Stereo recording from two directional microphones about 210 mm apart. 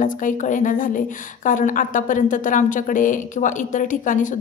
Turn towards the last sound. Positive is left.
turn(degrees=35)  # may be behind; listen again after turning